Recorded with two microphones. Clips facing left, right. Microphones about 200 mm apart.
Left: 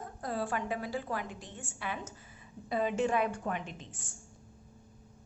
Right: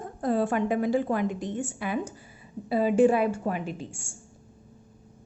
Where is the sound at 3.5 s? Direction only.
5° right (ahead or behind).